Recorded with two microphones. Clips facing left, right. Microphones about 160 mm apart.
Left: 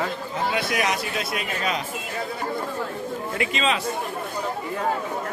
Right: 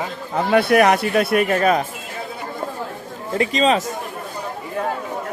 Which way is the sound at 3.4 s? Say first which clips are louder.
Right 8 dB; 40° right (ahead or behind).